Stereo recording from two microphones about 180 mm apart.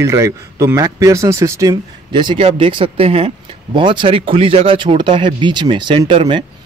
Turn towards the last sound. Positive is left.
turn(degrees=-30)  # may be behind; listen again after turning